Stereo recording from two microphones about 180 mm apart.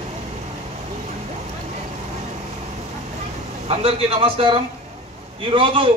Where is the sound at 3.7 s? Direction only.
35° right (ahead or behind).